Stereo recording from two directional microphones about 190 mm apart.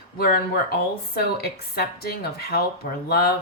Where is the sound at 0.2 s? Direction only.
55° left (ahead or behind).